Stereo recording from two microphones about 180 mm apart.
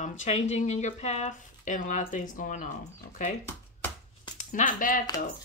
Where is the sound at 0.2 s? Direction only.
40° left (ahead or behind).